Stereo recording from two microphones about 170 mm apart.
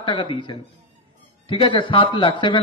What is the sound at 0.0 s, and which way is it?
Speech, 30° left (ahead or behind).